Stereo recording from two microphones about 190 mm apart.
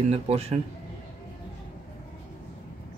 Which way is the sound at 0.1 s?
35° right (ahead or behind).